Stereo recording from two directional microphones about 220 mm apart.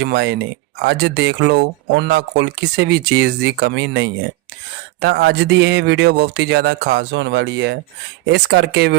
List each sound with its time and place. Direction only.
0.0 s speech: 50° right (ahead or behind)